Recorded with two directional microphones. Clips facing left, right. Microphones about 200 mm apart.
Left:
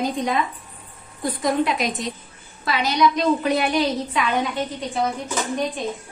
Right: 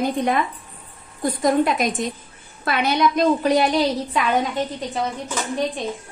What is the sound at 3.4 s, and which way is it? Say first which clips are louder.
Speech: right 3 dB; 40° right (ahead or behind).